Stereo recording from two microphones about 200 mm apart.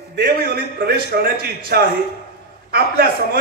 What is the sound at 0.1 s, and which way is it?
A man's voice, 55° right (ahead or behind).